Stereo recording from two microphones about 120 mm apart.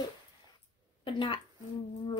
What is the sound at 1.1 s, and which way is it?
Speech, 45° left (ahead or behind).